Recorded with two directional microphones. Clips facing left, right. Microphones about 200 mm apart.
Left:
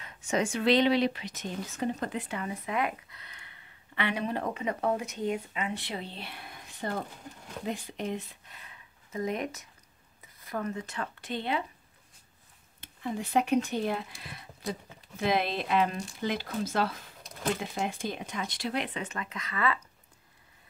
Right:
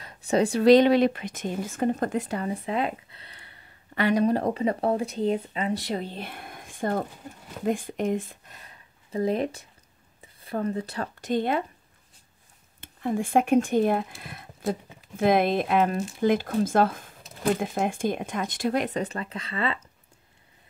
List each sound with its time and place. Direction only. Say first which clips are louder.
0.0 s speech: right 6 dB; 35° right (ahead or behind)
12.8 s speech: right 7 dB; 50° right (ahead or behind); by 19.8 s 30° right (ahead or behind)